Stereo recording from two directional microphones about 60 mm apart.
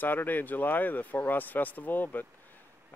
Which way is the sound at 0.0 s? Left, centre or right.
Left.